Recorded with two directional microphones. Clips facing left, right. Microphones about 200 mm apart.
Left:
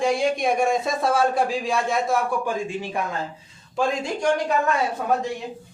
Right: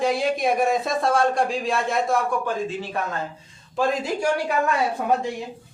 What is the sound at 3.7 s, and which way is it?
Speech, centre (ahead or behind).